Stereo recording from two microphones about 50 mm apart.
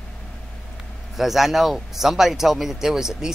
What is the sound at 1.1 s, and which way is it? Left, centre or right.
Speech, centre.